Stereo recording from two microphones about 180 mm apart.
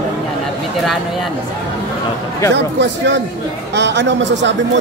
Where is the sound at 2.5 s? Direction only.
80° right.